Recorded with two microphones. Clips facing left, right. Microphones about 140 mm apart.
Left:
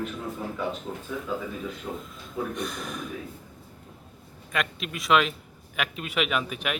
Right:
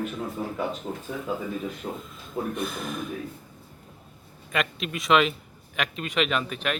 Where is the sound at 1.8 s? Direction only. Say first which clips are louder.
Right 1 dB; 50° right (ahead or behind).